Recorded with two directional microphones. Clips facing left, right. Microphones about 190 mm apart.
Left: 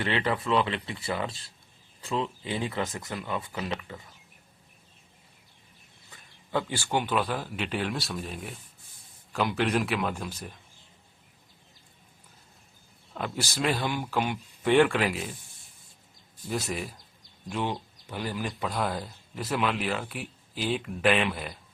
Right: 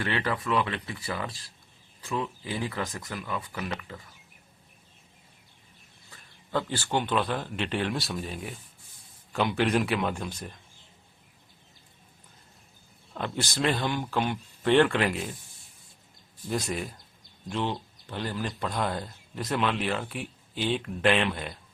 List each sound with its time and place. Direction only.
0.0 s speech: 20° left (ahead or behind)
6.5 s speech: 15° left (ahead or behind)
13.1 s speech: 5° left (ahead or behind)
16.5 s speech: centre (ahead or behind)